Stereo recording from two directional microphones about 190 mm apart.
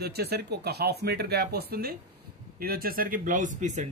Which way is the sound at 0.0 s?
55° right (ahead or behind).